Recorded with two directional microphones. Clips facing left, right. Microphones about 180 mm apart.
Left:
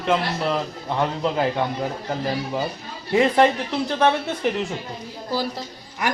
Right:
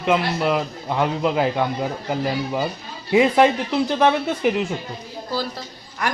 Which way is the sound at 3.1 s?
10° right (ahead or behind).